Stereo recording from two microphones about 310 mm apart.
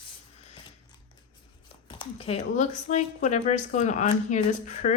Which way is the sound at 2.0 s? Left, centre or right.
Centre.